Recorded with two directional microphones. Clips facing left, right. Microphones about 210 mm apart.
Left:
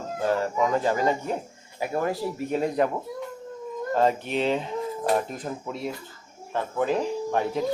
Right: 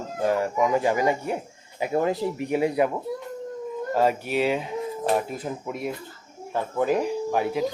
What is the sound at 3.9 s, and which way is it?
Speech, 10° right (ahead or behind).